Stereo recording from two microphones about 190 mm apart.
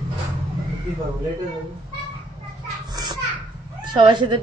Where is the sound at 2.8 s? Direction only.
20° right (ahead or behind).